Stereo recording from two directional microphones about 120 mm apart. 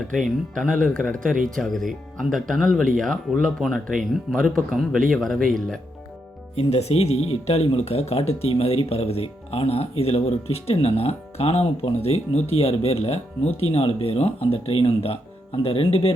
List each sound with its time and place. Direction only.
0.3 s speech: 5° left (ahead or behind)
6.6 s speech: 60° left (ahead or behind)